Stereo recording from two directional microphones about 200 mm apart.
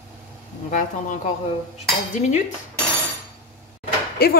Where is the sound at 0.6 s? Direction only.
40° left (ahead or behind).